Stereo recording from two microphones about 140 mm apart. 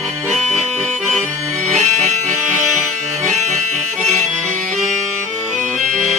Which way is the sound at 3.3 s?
55° right (ahead or behind).